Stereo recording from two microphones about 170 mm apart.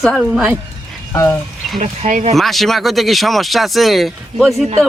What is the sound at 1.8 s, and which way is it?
Speech, 50° right (ahead or behind).